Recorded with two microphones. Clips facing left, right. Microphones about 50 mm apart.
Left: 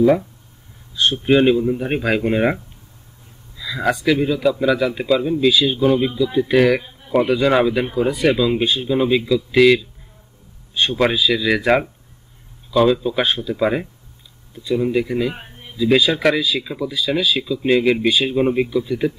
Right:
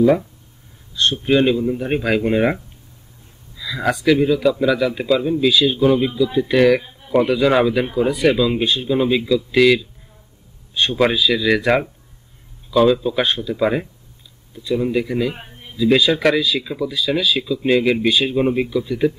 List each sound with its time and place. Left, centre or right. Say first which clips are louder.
0.0 s speech: even; centre